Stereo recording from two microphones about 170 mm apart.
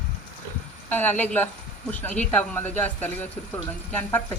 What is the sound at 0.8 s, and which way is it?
Speech, 10° left (ahead or behind).